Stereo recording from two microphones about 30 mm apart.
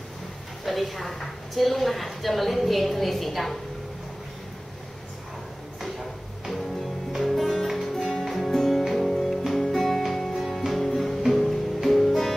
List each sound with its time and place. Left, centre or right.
0.7 s a woman's voice: centre
5.8 s drawer open or close: centre
7.2 s music: centre